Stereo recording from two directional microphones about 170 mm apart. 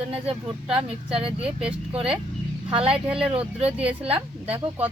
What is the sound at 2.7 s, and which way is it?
Speech, 30° right (ahead or behind).